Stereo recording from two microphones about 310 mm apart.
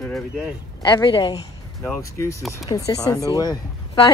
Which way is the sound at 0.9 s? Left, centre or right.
Centre.